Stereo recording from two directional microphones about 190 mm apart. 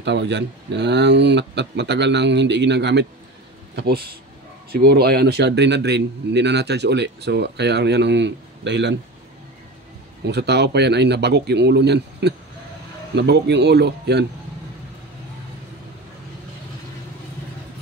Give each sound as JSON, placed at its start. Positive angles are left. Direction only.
{"t": 0.0, "sound": "a man's voice", "side_deg": -65}
{"t": 10.2, "sound": "a man's voice", "side_deg": -60}